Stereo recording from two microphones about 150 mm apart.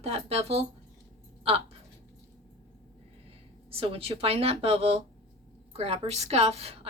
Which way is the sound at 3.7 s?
40° right (ahead or behind).